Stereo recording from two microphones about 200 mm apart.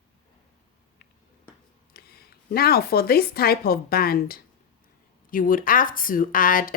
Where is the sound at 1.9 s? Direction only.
50° left (ahead or behind).